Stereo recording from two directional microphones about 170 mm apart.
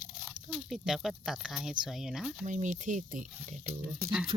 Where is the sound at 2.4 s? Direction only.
45° right (ahead or behind).